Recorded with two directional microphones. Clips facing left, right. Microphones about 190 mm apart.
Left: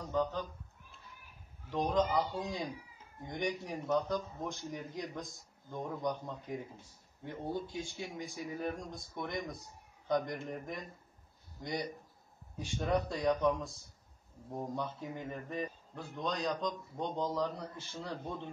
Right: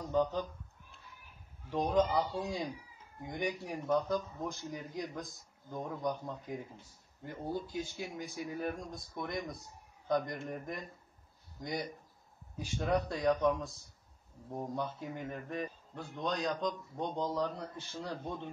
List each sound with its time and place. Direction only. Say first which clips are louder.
0.1 s speech: right 2 dB; 15° right (ahead or behind)
1.7 s a man's voice: right 1 dB; 10° right (ahead or behind)